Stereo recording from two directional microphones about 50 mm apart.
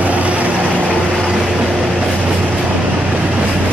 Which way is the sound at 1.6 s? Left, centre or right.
Centre.